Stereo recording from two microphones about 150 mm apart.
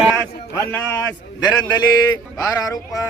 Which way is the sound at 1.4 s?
30° left (ahead or behind).